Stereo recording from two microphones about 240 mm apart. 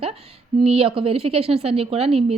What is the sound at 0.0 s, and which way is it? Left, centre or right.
A woman's voice, right.